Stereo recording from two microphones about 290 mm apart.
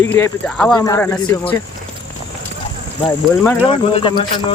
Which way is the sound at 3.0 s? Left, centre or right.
Centre.